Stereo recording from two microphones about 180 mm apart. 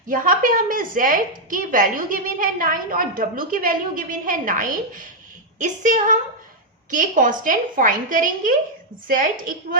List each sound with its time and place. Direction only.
0.1 s a woman's voice: 50° right (ahead or behind)